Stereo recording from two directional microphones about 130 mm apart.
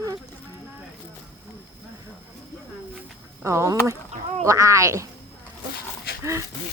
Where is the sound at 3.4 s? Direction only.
20° right (ahead or behind).